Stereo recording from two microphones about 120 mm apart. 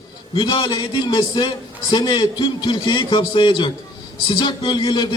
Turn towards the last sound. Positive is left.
turn(degrees=40)  # may be behind; listen again after turning